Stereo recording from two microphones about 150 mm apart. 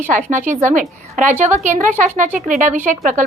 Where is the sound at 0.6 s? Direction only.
55° right (ahead or behind).